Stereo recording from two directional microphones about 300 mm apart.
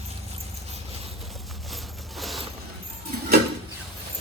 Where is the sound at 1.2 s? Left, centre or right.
Centre.